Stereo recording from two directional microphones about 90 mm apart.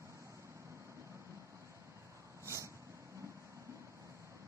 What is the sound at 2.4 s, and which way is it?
Vehicle, 35° right (ahead or behind).